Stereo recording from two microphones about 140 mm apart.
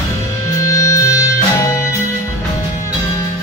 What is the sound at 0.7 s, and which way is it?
Music, 20° left (ahead or behind).